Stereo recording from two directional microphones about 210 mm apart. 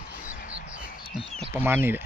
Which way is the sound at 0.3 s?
40° left (ahead or behind).